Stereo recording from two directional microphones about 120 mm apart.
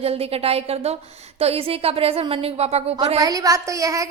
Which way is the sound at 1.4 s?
55° right (ahead or behind).